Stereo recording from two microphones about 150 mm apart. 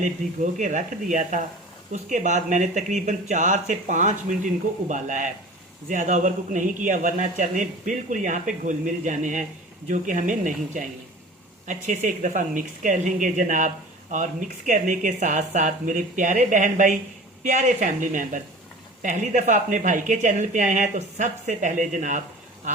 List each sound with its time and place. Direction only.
0.6 s speech: 55° right (ahead or behind)